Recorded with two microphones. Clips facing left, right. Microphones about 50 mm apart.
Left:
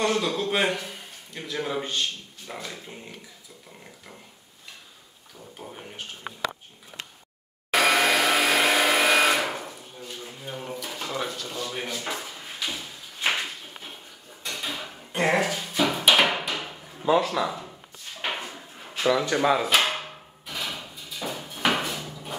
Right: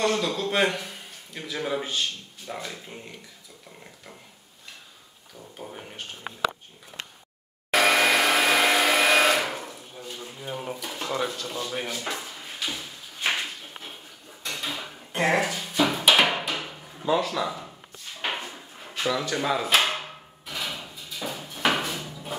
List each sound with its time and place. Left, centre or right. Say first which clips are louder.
0.0 s a man's voice: even; centre
3.8 s a sound: even; centre
5.6 s speech: right 1 dB; centre
7.7 s a sound: right 1 dB; centre
11.7 s speech: right 1 dB; centre
12.6 s a sound: even; centre
14.4 s drawer open or close: even; centre
17.1 s speech: left 2 dB; centre
18.2 s drawer open or close: even; centre
19.0 s speech: left 4 dB; centre
20.4 s drawer open or close: even; centre